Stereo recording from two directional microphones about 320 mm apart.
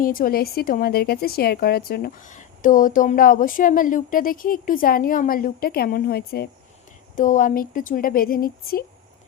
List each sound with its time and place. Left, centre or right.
0.0 s speech: left